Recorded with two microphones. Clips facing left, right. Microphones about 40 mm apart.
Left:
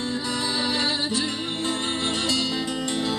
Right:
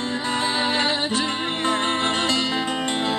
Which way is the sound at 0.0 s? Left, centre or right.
Right.